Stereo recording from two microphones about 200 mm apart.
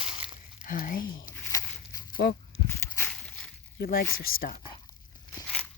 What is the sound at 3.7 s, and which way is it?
Speech, 45° left (ahead or behind).